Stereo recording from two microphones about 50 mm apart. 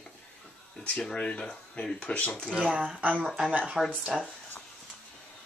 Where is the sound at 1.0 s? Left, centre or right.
Centre.